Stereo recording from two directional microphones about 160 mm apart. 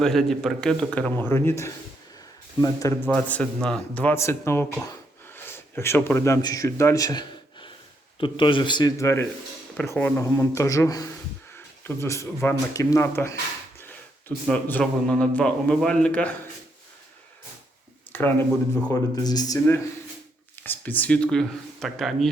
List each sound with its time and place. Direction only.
0.0 s speech: centre (ahead or behind); by 3.1 s 20° left (ahead or behind)
3.1 s a man's voice: 10° left (ahead or behind)
13.7 s a sound: 15° left (ahead or behind)
14.4 s a man's voice: 10° left (ahead or behind)
18.1 s speech: 10° left (ahead or behind)
19.1 s speech: 25° left (ahead or behind); by 22.3 s centre (ahead or behind)